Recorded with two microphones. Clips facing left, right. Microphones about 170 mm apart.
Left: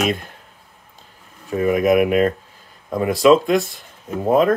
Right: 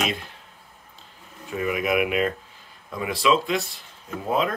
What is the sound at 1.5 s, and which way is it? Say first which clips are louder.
Speech: left 8 dB; 40° left (ahead or behind).